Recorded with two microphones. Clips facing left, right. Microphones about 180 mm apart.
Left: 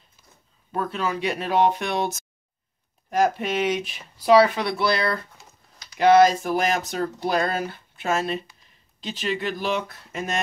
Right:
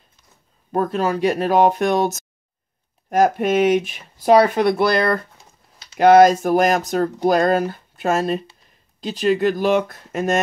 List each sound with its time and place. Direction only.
0.7 s speech: 45° right (ahead or behind)